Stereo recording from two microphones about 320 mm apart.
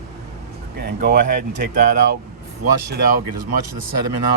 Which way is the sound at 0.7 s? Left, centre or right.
Right.